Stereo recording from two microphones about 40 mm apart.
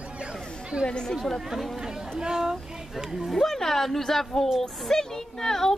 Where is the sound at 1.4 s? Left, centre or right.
Centre.